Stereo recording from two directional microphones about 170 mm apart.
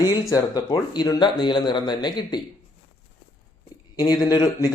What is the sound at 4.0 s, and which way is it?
Speech, 25° left (ahead or behind).